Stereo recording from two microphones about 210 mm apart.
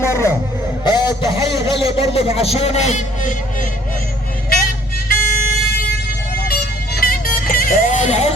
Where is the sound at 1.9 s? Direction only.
25° left (ahead or behind).